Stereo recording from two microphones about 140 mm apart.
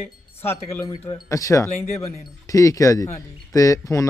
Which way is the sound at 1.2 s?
20° left (ahead or behind).